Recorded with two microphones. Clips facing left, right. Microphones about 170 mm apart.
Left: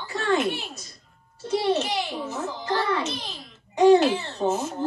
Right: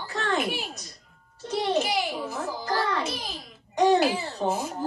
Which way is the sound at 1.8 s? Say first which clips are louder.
Right 1 dB; 10° right (ahead or behind).